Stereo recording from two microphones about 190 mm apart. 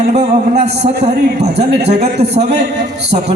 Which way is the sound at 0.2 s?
35° right (ahead or behind).